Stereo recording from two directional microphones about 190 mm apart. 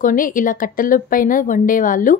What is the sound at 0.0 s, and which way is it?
A woman's voice, 45° left (ahead or behind).